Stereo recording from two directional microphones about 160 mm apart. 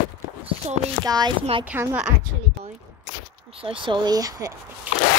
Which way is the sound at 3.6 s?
35° right (ahead or behind).